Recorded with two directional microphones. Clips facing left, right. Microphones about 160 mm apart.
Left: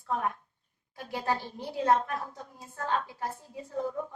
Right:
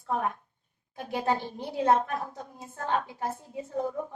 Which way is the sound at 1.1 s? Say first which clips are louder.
Right 3 dB; 20° right (ahead or behind).